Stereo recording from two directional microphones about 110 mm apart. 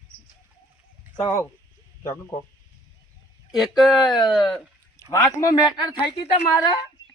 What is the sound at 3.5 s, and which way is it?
Speech, centre (ahead or behind).